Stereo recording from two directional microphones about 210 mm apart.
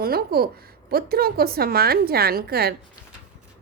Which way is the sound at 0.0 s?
45° right (ahead or behind).